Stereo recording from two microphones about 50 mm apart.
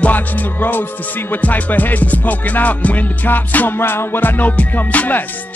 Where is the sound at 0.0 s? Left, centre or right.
Left.